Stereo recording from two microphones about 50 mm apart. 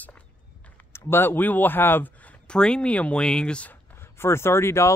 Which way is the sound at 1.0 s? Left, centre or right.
Left.